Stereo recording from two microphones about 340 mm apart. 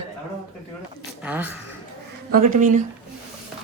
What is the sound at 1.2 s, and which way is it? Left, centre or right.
Speech, centre.